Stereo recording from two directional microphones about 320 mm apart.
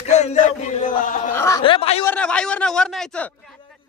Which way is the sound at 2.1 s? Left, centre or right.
Centre.